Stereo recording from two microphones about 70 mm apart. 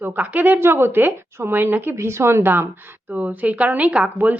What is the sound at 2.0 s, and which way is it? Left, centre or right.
Speech, right.